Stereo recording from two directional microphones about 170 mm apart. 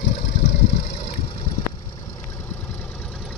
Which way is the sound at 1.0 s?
30° left (ahead or behind).